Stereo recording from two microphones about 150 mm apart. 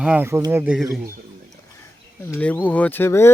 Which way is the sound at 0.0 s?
10° right (ahead or behind).